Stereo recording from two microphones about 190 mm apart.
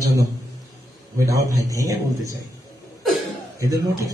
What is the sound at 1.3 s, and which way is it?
A man's voice, 15° right (ahead or behind).